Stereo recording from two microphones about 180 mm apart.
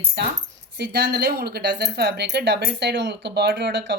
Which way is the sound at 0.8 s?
65° right (ahead or behind).